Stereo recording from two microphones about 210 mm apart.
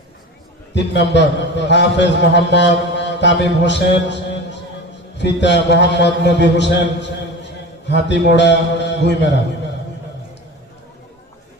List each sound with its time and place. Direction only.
0.7 s a man's voice: 55° left (ahead or behind)
2.9 s a sound: 55° left (ahead or behind)
5.1 s a man's voice: 55° left (ahead or behind)